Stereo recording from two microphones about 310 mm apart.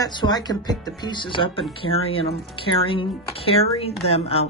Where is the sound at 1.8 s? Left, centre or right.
Left.